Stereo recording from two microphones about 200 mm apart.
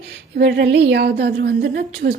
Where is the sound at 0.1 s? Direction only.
55° right (ahead or behind).